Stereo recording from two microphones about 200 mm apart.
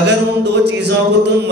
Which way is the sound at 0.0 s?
60° right (ahead or behind).